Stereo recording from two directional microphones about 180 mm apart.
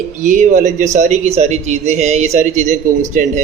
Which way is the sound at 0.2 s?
45° right (ahead or behind).